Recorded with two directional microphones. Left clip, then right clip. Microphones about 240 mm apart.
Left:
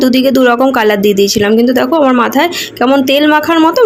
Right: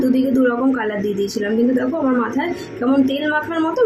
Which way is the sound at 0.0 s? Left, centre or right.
Left.